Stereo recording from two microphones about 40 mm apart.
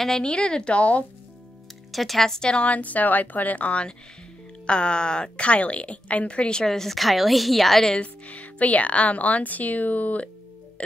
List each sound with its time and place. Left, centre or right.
0.2 s a woman's voice: left
0.7 s speech: left
1.9 s a woman's voice: centre
2.5 s speech: left
4.6 s a woman's voice: left
6.6 s a woman's voice: centre
8.0 s speech: left